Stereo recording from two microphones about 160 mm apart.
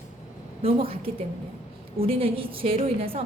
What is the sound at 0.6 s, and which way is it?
A woman's voice, 35° right (ahead or behind).